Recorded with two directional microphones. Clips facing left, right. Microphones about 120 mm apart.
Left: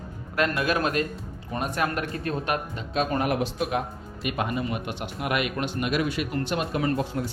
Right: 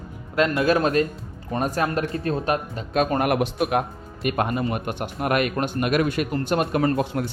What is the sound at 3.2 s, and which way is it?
A man's voice, 60° right (ahead or behind).